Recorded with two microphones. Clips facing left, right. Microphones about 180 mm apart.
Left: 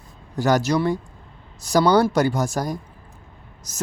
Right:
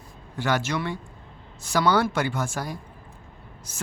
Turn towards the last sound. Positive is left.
turn(degrees=40)  # may be behind; listen again after turning